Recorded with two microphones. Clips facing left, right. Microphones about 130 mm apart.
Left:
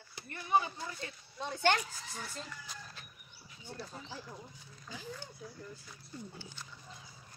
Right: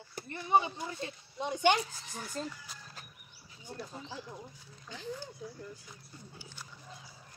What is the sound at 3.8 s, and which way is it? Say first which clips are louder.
Speech: right 3 dB; 10° right (ahead or behind).